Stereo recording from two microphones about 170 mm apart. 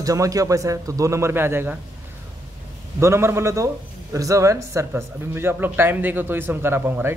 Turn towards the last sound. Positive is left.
turn(degrees=-15)  # may be behind; listen again after turning